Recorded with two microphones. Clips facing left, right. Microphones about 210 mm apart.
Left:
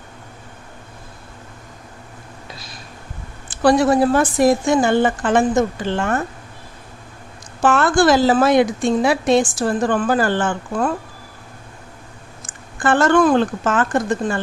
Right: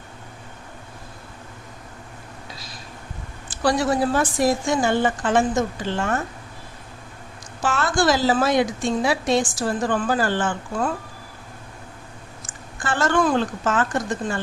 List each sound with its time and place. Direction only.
3.6 s a woman's voice: 55° left (ahead or behind)
7.6 s a woman's voice: 60° left (ahead or behind)
12.5 s speech: 55° left (ahead or behind)